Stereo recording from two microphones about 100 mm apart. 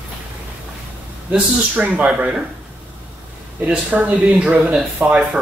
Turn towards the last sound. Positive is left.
turn(degrees=-15)  # may be behind; listen again after turning